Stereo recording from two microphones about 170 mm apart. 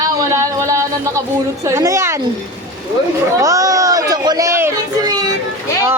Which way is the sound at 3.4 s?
20° right (ahead or behind).